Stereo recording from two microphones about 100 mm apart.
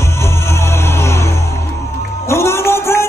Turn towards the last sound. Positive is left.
turn(degrees=25)  # may be behind; listen again after turning